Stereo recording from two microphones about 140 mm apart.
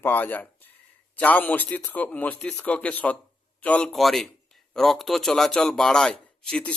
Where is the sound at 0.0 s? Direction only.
15° left (ahead or behind).